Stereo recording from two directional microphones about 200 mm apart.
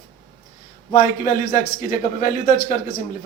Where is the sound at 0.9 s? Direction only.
45° left (ahead or behind).